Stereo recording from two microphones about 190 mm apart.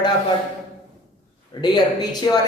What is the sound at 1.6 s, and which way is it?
Speech, 20° left (ahead or behind).